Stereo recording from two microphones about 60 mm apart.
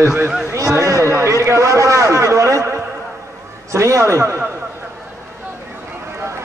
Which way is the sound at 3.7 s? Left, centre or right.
Right.